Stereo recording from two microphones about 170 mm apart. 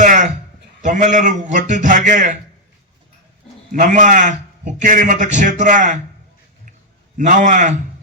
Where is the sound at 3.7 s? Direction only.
50° right (ahead or behind).